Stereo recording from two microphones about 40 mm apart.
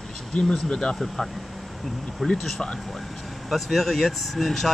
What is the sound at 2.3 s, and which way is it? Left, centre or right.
Speech, centre.